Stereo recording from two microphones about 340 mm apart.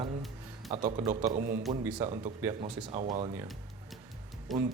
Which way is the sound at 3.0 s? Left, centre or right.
Right.